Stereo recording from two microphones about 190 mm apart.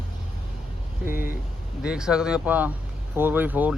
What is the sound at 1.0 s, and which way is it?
Vehicle, 50° left (ahead or behind).